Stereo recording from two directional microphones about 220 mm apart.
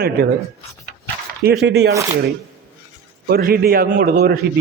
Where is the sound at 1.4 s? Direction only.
45° right (ahead or behind).